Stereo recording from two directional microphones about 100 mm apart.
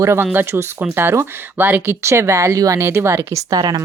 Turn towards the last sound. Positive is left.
turn(degrees=-45)  # may be behind; listen again after turning